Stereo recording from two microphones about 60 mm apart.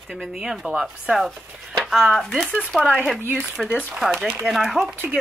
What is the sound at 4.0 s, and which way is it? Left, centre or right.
Speech, centre.